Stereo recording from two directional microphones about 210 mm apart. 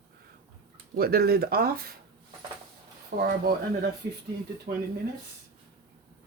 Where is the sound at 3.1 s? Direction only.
45° right (ahead or behind).